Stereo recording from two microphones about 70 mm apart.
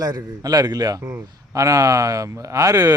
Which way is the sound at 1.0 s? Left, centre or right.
Right.